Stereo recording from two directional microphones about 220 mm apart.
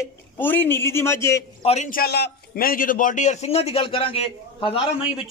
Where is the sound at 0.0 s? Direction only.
10° left (ahead or behind).